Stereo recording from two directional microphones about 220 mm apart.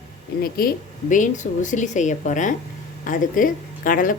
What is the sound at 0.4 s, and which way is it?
Speech, 40° left (ahead or behind).